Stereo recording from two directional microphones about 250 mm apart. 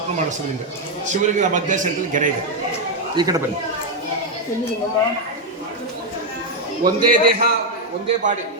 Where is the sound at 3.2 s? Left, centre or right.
Centre.